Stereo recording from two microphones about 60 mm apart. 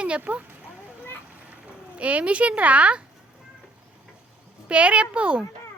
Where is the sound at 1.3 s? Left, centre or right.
Right.